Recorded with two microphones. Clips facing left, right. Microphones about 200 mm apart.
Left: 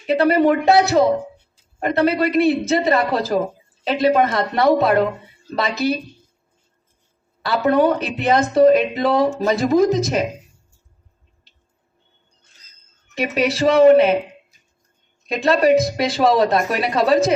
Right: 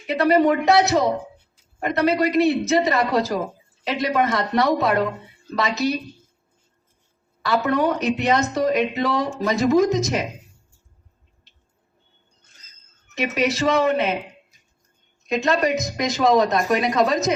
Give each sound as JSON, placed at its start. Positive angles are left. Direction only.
{"t": 0.4, "sound": "speech", "side_deg": 30}
{"t": 7.4, "sound": "speech", "side_deg": 30}
{"t": 13.1, "sound": "speech", "side_deg": 30}
{"t": 15.3, "sound": "speech", "side_deg": 35}